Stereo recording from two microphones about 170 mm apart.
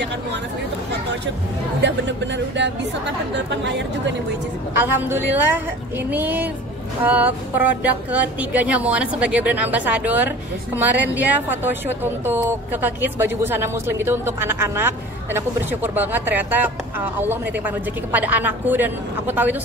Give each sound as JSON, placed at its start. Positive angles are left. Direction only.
{"t": 1.8, "sound": "speech", "side_deg": -90}
{"t": 5.0, "sound": "speech", "side_deg": -10}